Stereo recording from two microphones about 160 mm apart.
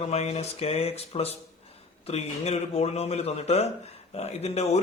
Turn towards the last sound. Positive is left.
turn(degrees=40)  # may be behind; listen again after turning